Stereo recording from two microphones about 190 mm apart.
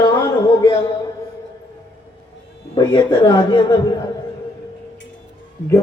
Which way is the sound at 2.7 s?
25° left (ahead or behind).